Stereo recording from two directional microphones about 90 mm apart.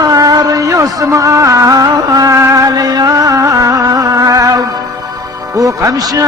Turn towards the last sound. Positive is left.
turn(degrees=-45)  # may be behind; listen again after turning